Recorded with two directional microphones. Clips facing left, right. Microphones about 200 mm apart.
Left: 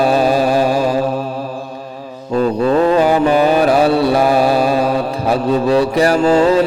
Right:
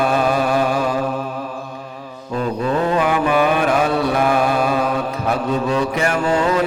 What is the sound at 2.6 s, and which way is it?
Mantra, 35° left (ahead or behind).